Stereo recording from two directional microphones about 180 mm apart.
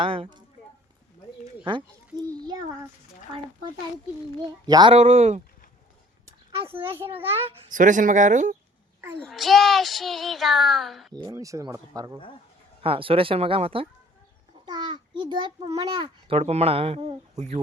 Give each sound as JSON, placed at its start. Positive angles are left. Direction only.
{"t": 0.0, "sound": "speech", "side_deg": -30}
{"t": 4.6, "sound": "speech", "side_deg": -25}
{"t": 4.9, "sound": "a child's voice", "side_deg": -35}
{"t": 6.7, "sound": "a child's voice", "side_deg": -30}
{"t": 7.7, "sound": "speech", "side_deg": -45}
{"t": 9.2, "sound": "speech", "side_deg": 0}
{"t": 11.1, "sound": "a child's voice", "side_deg": -20}